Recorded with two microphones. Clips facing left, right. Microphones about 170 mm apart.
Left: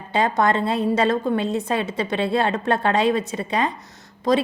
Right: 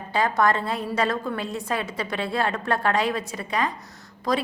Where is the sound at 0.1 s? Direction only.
20° left (ahead or behind).